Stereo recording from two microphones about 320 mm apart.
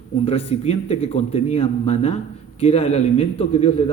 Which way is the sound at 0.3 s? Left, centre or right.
Centre.